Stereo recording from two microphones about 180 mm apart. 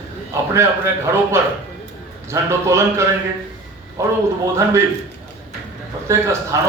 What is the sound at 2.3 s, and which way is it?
Speech, 15° right (ahead or behind).